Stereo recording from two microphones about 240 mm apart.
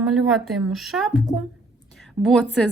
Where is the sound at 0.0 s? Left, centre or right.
Centre.